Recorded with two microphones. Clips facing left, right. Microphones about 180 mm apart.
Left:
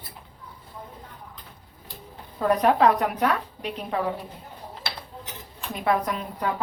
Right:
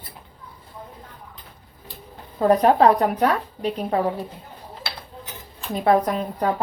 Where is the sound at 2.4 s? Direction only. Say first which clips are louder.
Right 4 dB; 35° right (ahead or behind).